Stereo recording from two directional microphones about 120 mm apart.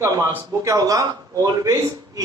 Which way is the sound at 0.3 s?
25° right (ahead or behind).